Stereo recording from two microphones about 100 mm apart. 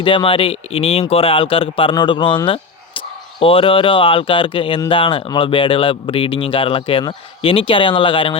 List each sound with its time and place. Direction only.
0.0 s speech: 60° left (ahead or behind)